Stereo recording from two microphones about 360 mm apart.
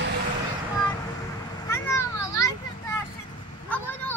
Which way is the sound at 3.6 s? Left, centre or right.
Centre.